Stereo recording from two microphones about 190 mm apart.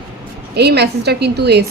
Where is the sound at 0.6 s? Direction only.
60° right (ahead or behind).